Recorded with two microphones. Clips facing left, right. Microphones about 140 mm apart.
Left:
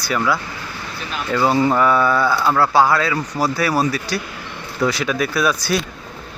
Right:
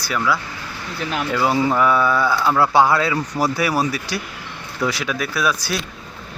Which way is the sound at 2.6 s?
20° right (ahead or behind).